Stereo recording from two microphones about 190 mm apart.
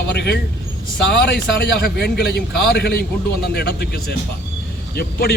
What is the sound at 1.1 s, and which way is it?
A man's voice, 65° left (ahead or behind).